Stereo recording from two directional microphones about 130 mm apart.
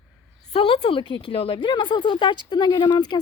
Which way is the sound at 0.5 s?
45° left (ahead or behind).